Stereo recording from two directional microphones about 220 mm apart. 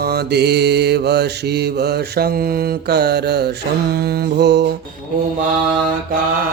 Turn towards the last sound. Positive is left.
turn(degrees=-50)  # may be behind; listen again after turning